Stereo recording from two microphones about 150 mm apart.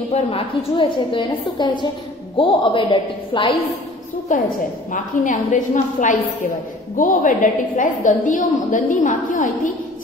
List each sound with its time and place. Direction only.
0.1 s a woman's voice: 40° left (ahead or behind)
4.3 s a woman's voice: 60° left (ahead or behind)